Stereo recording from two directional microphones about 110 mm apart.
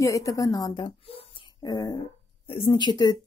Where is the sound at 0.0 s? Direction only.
30° left (ahead or behind); by 1.2 s 50° left (ahead or behind).